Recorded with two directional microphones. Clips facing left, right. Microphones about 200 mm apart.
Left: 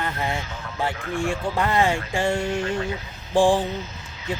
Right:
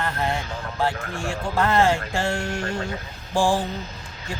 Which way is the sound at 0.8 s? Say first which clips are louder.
Left 1 dB; 15° left (ahead or behind).